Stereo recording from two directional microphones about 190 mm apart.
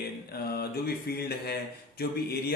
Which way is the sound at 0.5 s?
55° left (ahead or behind).